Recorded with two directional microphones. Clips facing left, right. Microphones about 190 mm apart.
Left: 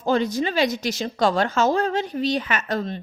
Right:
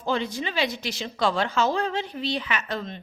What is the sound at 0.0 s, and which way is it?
Speech, 40° left (ahead or behind).